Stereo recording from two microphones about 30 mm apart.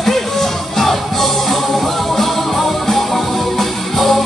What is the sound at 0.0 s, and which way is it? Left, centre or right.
Music, centre.